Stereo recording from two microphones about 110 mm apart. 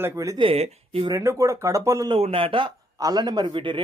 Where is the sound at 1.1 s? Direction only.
30° right (ahead or behind).